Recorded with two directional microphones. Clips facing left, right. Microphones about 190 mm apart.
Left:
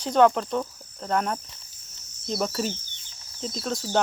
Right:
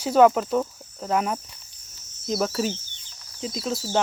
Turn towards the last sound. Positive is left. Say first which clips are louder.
# right 1 dB
turn(degrees=-5)  # may be behind; listen again after turning